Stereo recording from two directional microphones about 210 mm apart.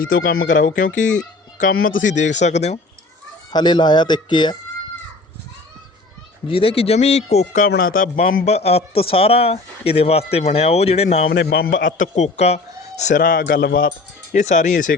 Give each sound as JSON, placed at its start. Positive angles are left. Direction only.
{"t": 0.0, "sound": "speech", "side_deg": 45}
{"t": 3.5, "sound": "a man's voice", "side_deg": 20}
{"t": 6.5, "sound": "a man's voice", "side_deg": 25}
{"t": 7.7, "sound": "a man's voice", "side_deg": 45}
{"t": 11.3, "sound": "speech", "side_deg": 50}
{"t": 11.9, "sound": "speech", "side_deg": 35}
{"t": 14.3, "sound": "speech", "side_deg": 35}
{"t": 14.9, "sound": "speech", "side_deg": 55}